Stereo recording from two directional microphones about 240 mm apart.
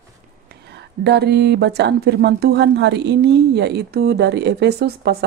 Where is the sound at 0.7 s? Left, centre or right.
Right.